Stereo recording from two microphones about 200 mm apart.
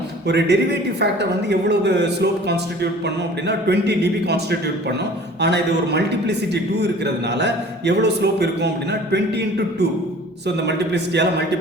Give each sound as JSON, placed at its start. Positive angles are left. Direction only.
{"t": 0.3, "sound": "a man's voice", "side_deg": -55}
{"t": 5.4, "sound": "a man's voice", "side_deg": -55}
{"t": 10.7, "sound": "a man's voice", "side_deg": -60}